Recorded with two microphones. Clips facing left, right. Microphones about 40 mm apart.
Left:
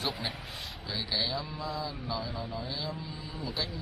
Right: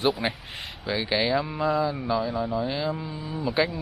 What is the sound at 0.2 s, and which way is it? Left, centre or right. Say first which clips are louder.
Speech: right 8 dB; right.